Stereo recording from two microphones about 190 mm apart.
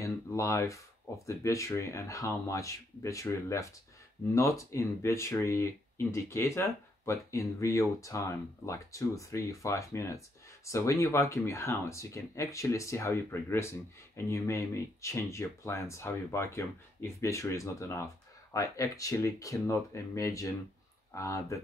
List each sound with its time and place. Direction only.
0.0 s speech: 15° left (ahead or behind)